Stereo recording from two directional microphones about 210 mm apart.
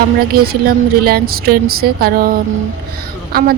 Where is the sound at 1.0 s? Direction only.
45° right (ahead or behind).